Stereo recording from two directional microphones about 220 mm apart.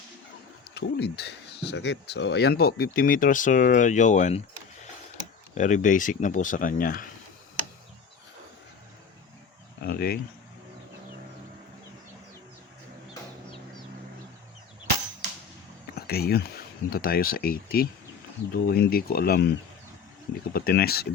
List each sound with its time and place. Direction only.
0.7 s speech: 50° left (ahead or behind); by 4.4 s 30° left (ahead or behind)
5.5 s speech: 35° left (ahead or behind)
9.8 s a sound: 45° left (ahead or behind)
16.0 s a sound: 45° left (ahead or behind)
16.9 s speech: 40° left (ahead or behind)
20.5 s speech: 45° left (ahead or behind)